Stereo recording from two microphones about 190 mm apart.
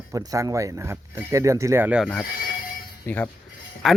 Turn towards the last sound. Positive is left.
turn(degrees=0)  # may be behind; listen again after turning